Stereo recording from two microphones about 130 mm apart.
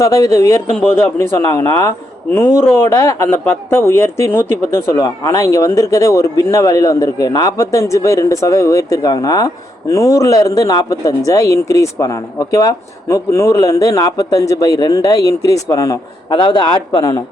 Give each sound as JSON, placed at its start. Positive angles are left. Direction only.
{"t": 0.0, "sound": "a man's voice", "side_deg": 25}